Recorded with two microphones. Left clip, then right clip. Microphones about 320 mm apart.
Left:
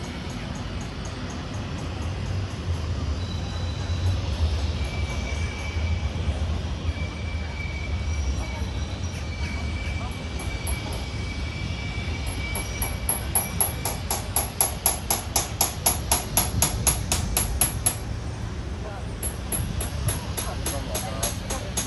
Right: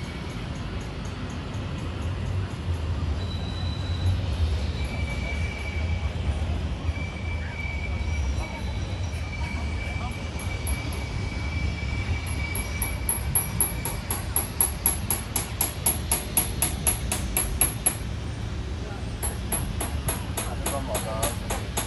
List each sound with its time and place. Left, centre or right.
15.3 s music: centre
20.6 s vehicle: centre